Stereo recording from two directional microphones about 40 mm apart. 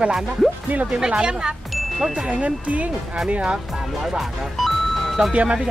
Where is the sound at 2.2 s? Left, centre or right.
Right.